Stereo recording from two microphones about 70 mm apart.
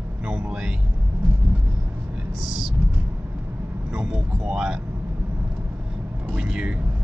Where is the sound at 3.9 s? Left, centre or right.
Centre.